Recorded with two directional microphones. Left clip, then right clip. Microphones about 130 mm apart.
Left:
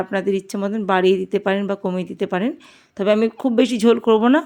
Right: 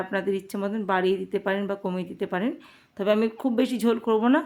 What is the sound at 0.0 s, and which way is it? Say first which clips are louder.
Speech: left 6 dB; 45° left (ahead or behind).